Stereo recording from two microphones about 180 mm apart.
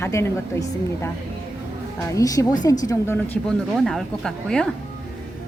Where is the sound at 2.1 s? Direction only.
20° left (ahead or behind).